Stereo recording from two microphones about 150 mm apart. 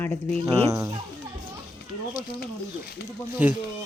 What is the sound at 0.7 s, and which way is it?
Speech, 20° right (ahead or behind).